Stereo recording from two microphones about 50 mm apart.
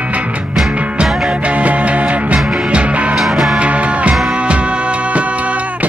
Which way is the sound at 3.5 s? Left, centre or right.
Right.